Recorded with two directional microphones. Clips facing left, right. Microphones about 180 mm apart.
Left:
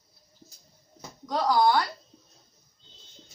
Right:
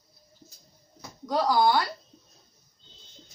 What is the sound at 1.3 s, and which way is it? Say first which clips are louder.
Speech: even; 5° right (ahead or behind).